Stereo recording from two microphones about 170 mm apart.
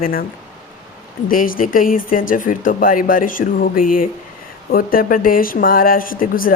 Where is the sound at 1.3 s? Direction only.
55° left (ahead or behind).